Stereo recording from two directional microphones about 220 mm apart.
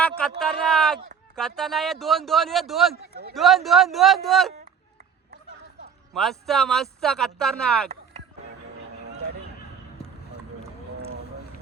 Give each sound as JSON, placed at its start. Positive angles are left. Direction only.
{"t": 0.2, "sound": "speech", "side_deg": 0}
{"t": 3.1, "sound": "a man's voice", "side_deg": -45}
{"t": 3.3, "sound": "speech", "side_deg": 0}
{"t": 6.1, "sound": "speech", "side_deg": 0}